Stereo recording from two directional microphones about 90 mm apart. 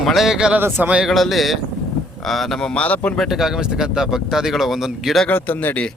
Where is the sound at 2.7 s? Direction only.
15° left (ahead or behind).